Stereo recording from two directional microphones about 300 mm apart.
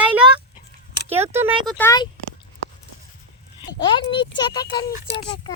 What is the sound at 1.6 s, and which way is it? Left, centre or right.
Speech, centre.